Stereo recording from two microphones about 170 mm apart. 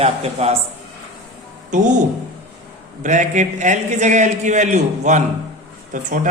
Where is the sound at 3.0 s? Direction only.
45° right (ahead or behind).